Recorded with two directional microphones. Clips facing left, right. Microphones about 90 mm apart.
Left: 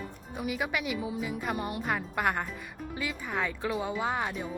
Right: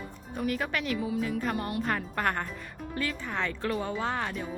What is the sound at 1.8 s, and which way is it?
Speech, 5° left (ahead or behind).